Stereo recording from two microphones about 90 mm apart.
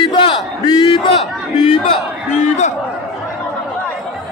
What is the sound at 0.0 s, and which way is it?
Battle cry, 65° left (ahead or behind).